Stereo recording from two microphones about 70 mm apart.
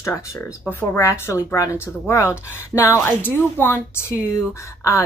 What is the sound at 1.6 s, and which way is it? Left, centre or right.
Speech, left.